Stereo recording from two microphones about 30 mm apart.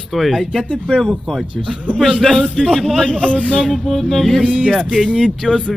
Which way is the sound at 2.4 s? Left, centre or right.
Left.